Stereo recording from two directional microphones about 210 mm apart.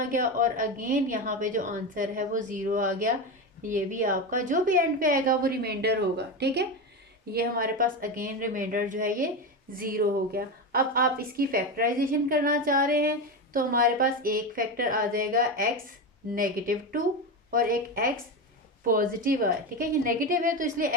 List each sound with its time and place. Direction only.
0.1 s a woman's voice: 40° right (ahead or behind)